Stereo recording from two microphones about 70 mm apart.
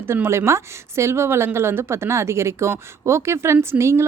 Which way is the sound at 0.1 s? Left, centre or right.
Right.